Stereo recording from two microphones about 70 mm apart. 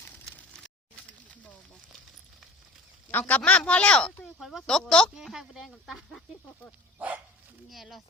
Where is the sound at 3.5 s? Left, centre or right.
Centre.